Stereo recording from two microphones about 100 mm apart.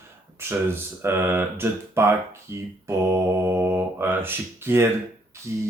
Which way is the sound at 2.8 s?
25° right (ahead or behind).